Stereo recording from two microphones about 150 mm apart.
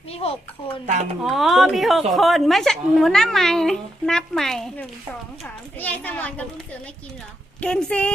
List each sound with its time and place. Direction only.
0.1 s a sound: 40° left (ahead or behind)
1.2 s a woman's voice: centre (ahead or behind)
7.6 s a child's voice: 5° left (ahead or behind)